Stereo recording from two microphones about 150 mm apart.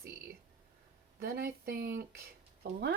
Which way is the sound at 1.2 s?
80° right.